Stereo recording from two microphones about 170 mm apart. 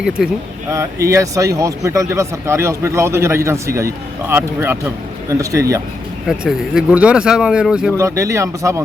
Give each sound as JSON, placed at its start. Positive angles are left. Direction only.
{"t": 0.2, "sound": "speech", "side_deg": -5}
{"t": 0.7, "sound": "a man's voice", "side_deg": -20}
{"t": 6.2, "sound": "speech", "side_deg": -5}
{"t": 7.9, "sound": "a man's voice", "side_deg": -20}